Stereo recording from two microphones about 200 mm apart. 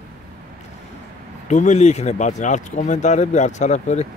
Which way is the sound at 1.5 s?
35° left (ahead or behind).